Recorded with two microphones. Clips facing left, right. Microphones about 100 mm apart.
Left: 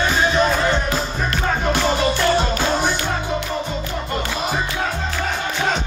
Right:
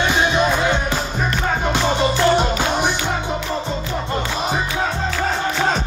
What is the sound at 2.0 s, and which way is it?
Music, 20° right (ahead or behind).